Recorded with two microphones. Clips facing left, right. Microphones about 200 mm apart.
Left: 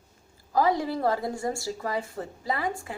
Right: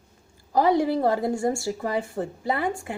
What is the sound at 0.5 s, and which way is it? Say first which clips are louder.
A woman's voice: right 4 dB; 20° right (ahead or behind).